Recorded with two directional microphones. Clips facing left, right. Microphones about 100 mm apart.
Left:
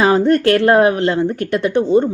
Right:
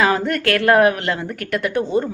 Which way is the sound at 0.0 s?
30° left (ahead or behind).